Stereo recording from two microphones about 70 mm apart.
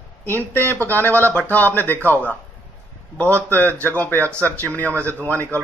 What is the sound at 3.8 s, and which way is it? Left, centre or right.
Speech, left.